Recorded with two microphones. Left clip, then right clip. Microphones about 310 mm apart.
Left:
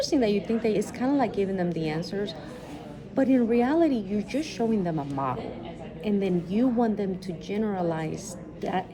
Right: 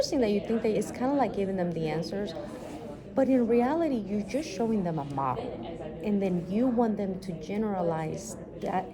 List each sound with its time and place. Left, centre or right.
0.0 s a woman's voice: centre